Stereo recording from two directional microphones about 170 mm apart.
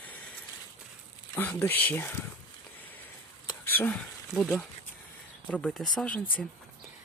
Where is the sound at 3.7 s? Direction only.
10° left (ahead or behind).